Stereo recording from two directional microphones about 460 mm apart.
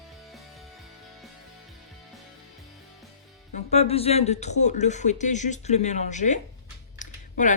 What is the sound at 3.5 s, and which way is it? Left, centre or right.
Speech, centre.